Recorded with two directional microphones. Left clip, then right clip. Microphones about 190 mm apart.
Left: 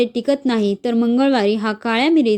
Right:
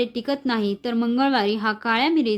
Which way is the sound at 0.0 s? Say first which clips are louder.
Left 7 dB; 25° left (ahead or behind).